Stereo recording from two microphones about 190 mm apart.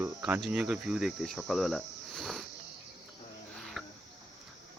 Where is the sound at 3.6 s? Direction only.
Centre (ahead or behind).